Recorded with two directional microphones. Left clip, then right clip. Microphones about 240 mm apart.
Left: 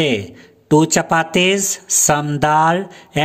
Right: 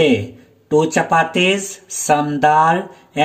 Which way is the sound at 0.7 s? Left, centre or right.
Left.